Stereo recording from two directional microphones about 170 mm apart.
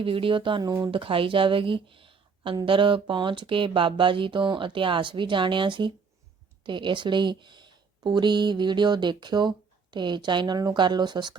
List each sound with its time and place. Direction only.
0.0 s speech: 30° right (ahead or behind)